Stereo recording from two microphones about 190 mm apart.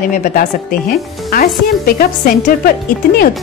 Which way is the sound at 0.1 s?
45° left (ahead or behind).